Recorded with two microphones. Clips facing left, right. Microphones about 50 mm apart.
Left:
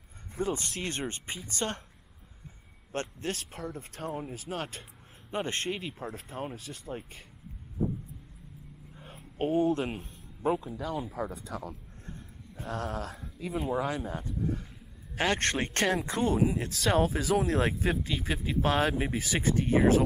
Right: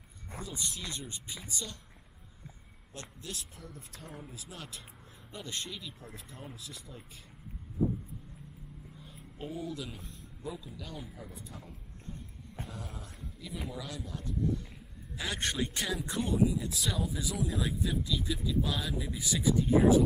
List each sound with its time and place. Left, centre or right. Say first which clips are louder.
0.4 s speech: left 9 dB; left
2.9 s speech: left 11 dB; left
4.2 s speech: left 10 dB; left
8.9 s a man's voice: left 7 dB; left
13.6 s speech: left 11 dB; left
15.1 s speech: left 6 dB; left
19.1 s speech: left 1 dB; left